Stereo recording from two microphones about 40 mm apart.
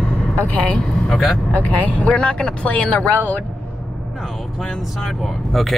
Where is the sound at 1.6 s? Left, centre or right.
Left.